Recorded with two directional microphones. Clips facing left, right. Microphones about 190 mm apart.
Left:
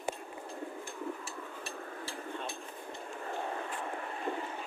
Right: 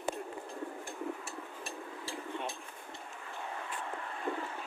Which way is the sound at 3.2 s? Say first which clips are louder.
Left 6 dB; 45° left (ahead or behind).